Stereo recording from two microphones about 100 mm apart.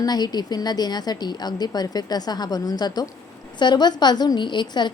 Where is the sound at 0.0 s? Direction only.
40° left (ahead or behind).